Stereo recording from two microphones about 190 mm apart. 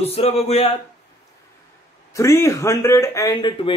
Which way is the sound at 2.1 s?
15° left (ahead or behind).